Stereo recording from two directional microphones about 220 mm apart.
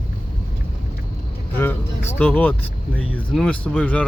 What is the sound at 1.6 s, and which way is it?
Vehicle, 10° left (ahead or behind).